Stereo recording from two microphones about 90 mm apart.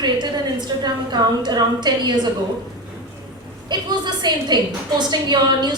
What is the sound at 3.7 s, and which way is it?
A woman's voice, 55° right (ahead or behind).